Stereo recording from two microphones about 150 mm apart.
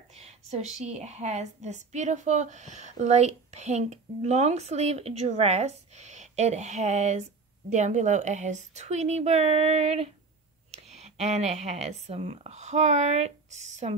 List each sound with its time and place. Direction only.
0.1 s a woman's voice: 45° right (ahead or behind)